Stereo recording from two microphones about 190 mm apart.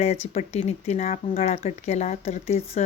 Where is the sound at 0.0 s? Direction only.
35° left (ahead or behind).